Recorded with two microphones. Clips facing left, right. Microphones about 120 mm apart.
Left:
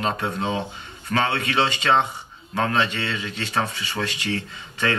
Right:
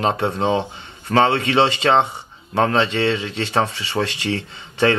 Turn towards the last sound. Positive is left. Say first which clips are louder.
# right 7 dB
turn(degrees=-25)  # may be behind; listen again after turning